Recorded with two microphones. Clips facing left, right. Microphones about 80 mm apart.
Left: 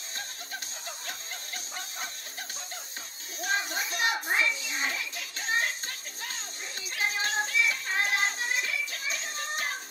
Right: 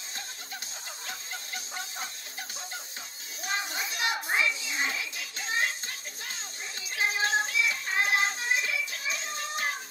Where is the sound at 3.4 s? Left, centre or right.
Left.